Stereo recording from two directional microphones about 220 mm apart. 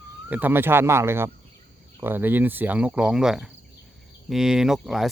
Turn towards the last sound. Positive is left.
turn(degrees=0)  # may be behind; listen again after turning